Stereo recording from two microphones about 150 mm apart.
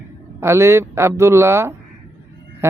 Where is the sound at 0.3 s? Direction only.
15° right (ahead or behind).